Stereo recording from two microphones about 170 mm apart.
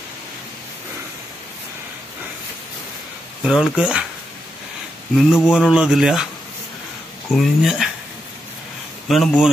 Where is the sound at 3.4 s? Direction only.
5° right (ahead or behind).